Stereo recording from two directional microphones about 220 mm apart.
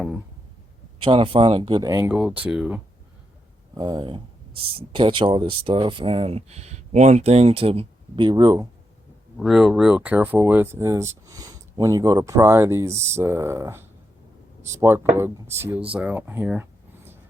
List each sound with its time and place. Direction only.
1.0 s speech: 25° right (ahead or behind); by 2.8 s 5° right (ahead or behind)
3.8 s speech: 20° right (ahead or behind)
9.4 s speech: centre (ahead or behind)